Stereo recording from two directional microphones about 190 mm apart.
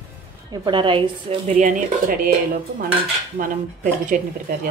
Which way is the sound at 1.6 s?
45° right (ahead or behind).